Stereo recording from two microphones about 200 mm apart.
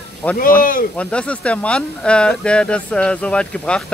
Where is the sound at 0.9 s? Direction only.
5° left (ahead or behind).